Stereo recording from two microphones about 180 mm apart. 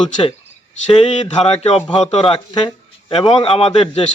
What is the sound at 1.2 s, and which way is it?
A man's voice, 35° left (ahead or behind).